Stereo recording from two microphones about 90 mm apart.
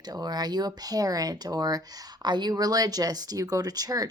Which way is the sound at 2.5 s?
45° right (ahead or behind).